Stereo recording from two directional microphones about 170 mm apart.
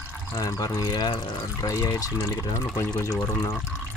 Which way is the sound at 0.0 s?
15° left (ahead or behind).